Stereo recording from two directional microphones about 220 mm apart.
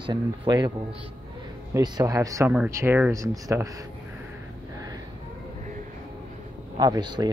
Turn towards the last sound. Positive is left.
turn(degrees=-20)  # may be behind; listen again after turning